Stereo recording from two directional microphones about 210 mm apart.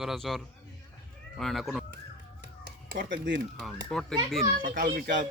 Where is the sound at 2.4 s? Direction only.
50° right (ahead or behind).